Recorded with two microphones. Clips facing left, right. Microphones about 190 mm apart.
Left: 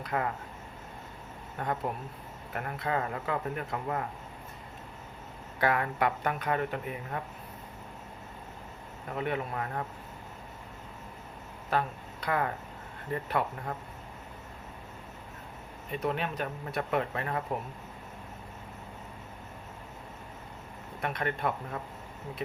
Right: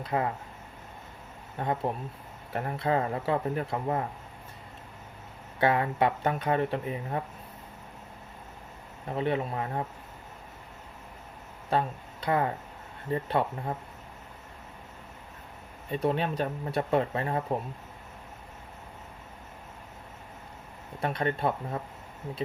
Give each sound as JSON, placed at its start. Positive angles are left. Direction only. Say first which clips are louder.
{"t": 0.0, "sound": "speech", "louder": "right 3 dB", "side_deg": -25}
{"t": 1.5, "sound": "speech", "louder": "right 3 dB", "side_deg": -20}
{"t": 5.5, "sound": "speech", "louder": "right 3 dB", "side_deg": -25}
{"t": 9.1, "sound": "speech", "louder": "right 4 dB", "side_deg": -30}
{"t": 11.7, "sound": "speech", "louder": "right 2 dB", "side_deg": -25}
{"t": 15.9, "sound": "speech", "louder": "right 4 dB", "side_deg": -30}
{"t": 21.0, "sound": "speech", "louder": "right 4 dB", "side_deg": -30}